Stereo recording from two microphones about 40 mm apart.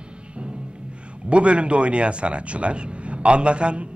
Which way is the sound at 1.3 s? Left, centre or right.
Right.